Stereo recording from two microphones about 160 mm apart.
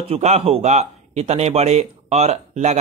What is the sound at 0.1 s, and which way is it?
Speech, 40° right (ahead or behind).